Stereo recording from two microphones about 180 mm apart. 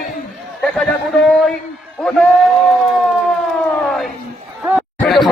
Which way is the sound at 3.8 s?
Centre (ahead or behind).